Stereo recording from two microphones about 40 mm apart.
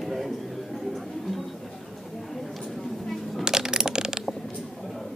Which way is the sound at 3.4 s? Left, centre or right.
Centre.